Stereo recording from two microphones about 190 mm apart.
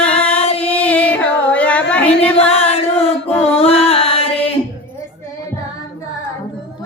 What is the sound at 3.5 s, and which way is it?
Music, 30° left (ahead or behind).